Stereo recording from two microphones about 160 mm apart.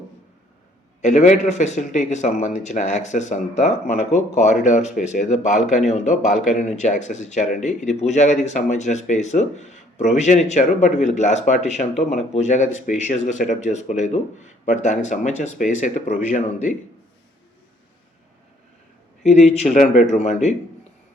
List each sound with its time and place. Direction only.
1.0 s speech: 50° left (ahead or behind)
19.2 s speech: 45° left (ahead or behind)